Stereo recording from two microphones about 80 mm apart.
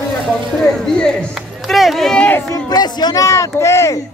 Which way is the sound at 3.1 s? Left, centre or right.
Left.